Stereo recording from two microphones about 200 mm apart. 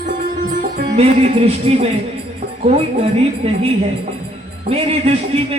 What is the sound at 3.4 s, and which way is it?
Speech, 30° right (ahead or behind).